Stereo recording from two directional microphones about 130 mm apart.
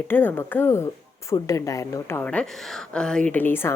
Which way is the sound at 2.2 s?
10° left (ahead or behind).